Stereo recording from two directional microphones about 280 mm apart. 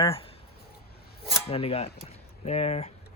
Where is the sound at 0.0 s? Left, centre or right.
Centre.